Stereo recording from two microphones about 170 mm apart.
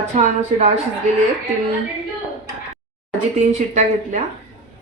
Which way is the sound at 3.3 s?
45° right (ahead or behind).